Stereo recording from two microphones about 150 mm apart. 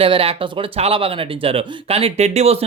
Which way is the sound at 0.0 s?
40° right (ahead or behind).